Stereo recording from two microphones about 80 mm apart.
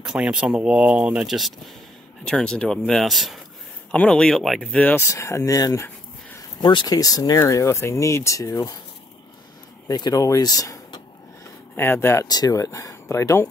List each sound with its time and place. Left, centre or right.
0.0 s speech: centre
1.3 s speech: centre
2.2 s speech: centre
2.9 s speech: centre
3.9 s speech: centre
4.9 s speech: left
6.6 s speech: left
6.9 s speech: left
7.3 s speech: left
9.8 s speech: left
11.7 s speech: left
12.3 s speech: left